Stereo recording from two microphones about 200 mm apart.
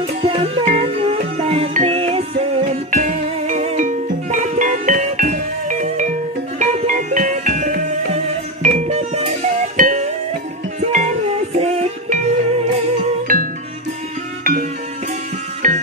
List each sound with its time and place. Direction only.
0.0 s music: 30° right (ahead or behind)
13.3 s music: 45° right (ahead or behind)